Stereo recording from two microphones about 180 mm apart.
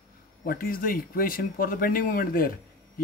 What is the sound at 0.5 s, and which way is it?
Speech, 55° left (ahead or behind).